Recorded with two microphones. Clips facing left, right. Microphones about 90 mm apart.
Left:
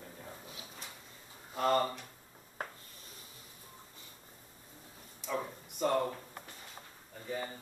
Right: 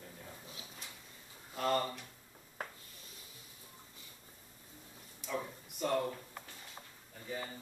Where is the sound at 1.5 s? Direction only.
30° left (ahead or behind).